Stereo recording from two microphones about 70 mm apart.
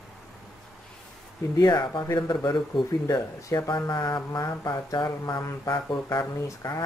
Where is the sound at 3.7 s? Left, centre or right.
Left.